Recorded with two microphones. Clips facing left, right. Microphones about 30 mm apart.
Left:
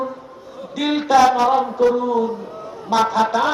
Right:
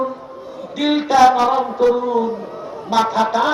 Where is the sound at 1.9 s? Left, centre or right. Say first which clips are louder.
Right 1 dB; centre.